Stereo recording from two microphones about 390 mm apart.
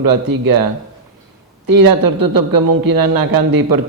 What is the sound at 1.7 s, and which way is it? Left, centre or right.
A man's voice, right.